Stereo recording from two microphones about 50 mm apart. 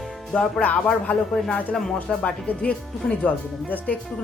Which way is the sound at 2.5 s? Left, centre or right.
Left.